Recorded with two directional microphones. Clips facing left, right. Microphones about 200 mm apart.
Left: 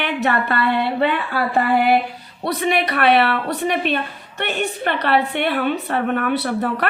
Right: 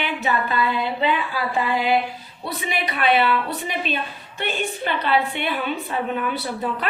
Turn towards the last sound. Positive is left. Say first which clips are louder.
# left 5 dB
turn(degrees=70)  # may be behind; listen again after turning